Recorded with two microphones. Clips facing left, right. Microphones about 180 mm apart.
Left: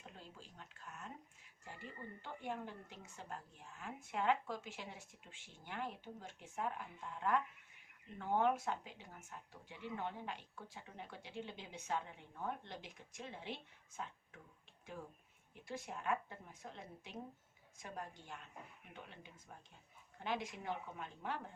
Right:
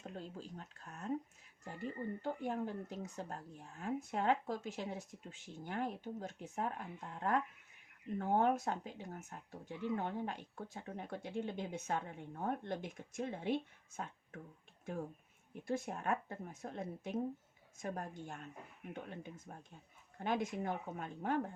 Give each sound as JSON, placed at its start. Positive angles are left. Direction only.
{"t": 0.0, "sound": "speech", "side_deg": -45}
{"t": 15.5, "sound": "speech", "side_deg": -50}